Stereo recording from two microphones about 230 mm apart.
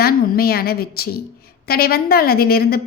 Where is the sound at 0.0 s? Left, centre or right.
Left.